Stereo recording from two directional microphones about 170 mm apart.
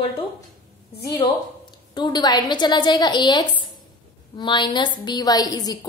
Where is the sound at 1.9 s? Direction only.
25° left (ahead or behind).